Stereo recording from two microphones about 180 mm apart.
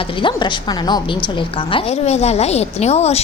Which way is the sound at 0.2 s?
25° left (ahead or behind).